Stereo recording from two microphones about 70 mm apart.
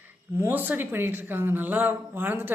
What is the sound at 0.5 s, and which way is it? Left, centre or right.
A man's voice, right.